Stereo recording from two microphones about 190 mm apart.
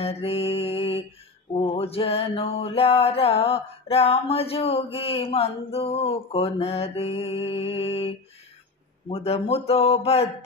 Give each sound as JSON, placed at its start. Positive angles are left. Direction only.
{"t": 0.0, "sound": "mantra", "side_deg": 30}
{"t": 9.1, "sound": "mantra", "side_deg": 30}